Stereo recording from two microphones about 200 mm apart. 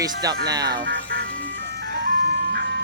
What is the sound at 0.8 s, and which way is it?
Music, 65° right (ahead or behind).